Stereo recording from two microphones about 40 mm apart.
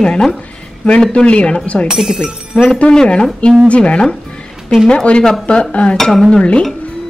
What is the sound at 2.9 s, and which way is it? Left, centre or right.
A woman's voice, left.